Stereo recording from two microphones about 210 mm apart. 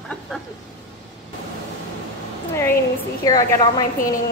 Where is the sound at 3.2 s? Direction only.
15° left (ahead or behind).